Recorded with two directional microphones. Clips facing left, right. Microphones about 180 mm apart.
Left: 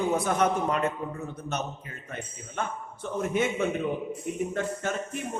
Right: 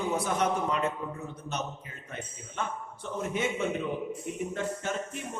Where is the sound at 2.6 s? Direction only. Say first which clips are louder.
Left 2 dB; 50° left (ahead or behind).